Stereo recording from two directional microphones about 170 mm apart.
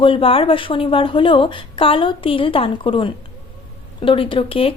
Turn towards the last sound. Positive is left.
turn(degrees=30)  # may be behind; listen again after turning